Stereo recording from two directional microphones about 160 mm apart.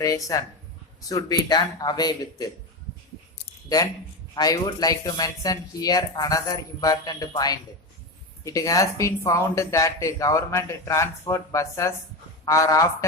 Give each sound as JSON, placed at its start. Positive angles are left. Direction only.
{"t": 0.0, "sound": "speech", "side_deg": 20}
{"t": 4.4, "sound": "speech", "side_deg": 25}